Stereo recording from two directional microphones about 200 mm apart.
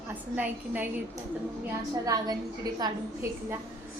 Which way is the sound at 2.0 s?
20° right (ahead or behind).